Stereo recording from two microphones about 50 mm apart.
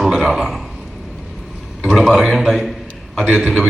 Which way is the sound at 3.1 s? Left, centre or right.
Centre.